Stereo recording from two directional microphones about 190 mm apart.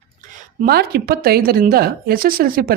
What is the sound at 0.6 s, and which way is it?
Speech, 55° right (ahead or behind).